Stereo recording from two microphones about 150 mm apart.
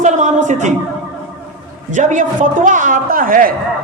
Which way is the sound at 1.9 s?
55° right (ahead or behind).